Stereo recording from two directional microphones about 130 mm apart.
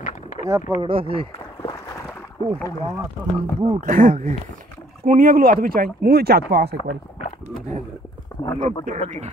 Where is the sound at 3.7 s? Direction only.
90° right.